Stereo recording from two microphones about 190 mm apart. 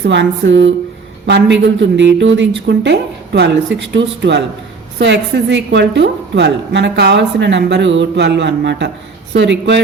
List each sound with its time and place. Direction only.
0.0 s a woman's voice: 70° right (ahead or behind)